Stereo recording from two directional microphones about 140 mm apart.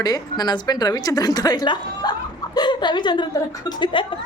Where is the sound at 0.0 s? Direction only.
30° left (ahead or behind).